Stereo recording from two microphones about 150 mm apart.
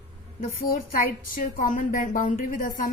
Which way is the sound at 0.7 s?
70° left (ahead or behind).